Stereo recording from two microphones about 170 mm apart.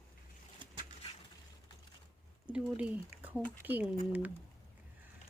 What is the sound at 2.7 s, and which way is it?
Speech, 10° right (ahead or behind).